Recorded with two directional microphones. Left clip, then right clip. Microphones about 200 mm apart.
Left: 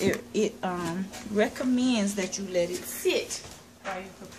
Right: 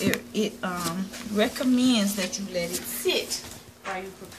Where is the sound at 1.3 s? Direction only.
15° left (ahead or behind).